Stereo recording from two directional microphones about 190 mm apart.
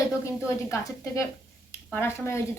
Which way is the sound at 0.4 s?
15° left (ahead or behind).